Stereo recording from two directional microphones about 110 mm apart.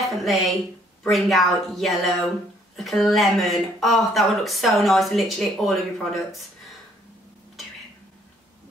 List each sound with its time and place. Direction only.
0.0 s a woman's voice: centre (ahead or behind)